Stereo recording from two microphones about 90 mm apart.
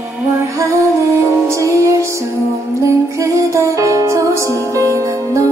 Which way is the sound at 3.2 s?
35° right (ahead or behind).